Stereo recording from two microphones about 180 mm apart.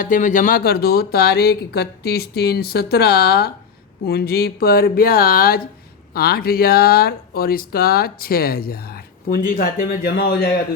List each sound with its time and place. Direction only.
0.0 s speech: 45° left (ahead or behind)